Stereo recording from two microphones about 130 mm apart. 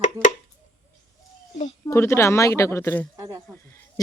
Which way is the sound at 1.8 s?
20° left (ahead or behind).